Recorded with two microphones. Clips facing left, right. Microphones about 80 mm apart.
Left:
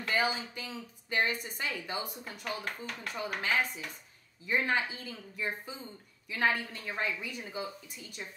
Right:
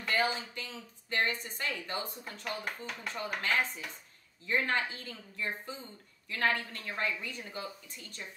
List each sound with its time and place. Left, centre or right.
0.0 s speech: centre
3.1 s speech: centre